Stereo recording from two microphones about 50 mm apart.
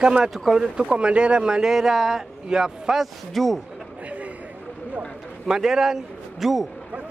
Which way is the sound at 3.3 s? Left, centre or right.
Centre.